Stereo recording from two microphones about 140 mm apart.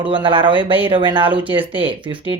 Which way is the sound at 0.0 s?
35° right (ahead or behind).